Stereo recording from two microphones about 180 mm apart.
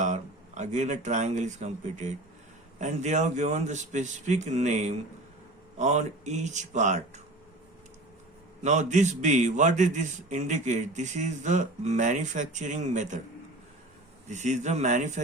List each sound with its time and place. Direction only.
0.0 s a man's voice: 40° right (ahead or behind)
8.6 s a man's voice: 40° right (ahead or behind)
14.3 s a man's voice: 40° right (ahead or behind)